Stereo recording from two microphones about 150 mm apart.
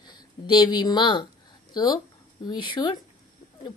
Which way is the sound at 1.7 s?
25° left (ahead or behind).